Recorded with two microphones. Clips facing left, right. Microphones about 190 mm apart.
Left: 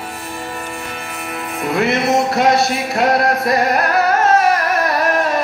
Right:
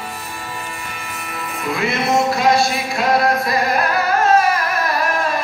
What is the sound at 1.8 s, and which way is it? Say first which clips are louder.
Music: left 3 dB; 65° left (ahead or behind).